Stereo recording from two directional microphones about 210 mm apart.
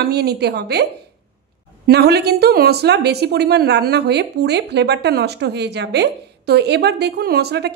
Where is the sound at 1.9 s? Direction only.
50° right (ahead or behind).